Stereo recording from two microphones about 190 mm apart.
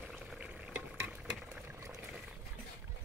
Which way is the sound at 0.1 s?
5° right (ahead or behind).